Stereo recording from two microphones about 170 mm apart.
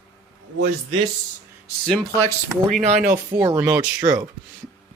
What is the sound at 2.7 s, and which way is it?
Speech, 40° right (ahead or behind).